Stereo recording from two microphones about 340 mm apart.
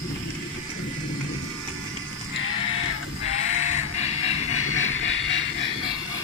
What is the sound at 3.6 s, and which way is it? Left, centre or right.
Music, centre.